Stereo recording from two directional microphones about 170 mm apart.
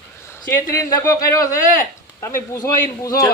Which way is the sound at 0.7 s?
20° left (ahead or behind).